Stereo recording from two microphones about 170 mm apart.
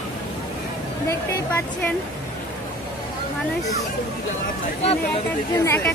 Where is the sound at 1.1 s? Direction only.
15° left (ahead or behind).